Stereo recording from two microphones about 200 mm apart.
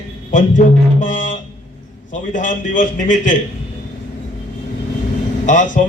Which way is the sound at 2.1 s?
40° left (ahead or behind).